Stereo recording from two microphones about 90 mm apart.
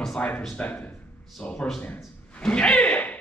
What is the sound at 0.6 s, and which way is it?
Speech, 20° left (ahead or behind).